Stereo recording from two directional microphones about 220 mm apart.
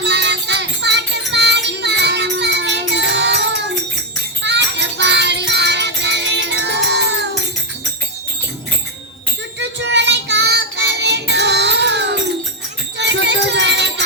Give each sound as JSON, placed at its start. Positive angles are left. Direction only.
{"t": 0.0, "sound": "music", "side_deg": -50}
{"t": 9.6, "sound": "child singing", "side_deg": -55}
{"t": 13.0, "sound": "music", "side_deg": -55}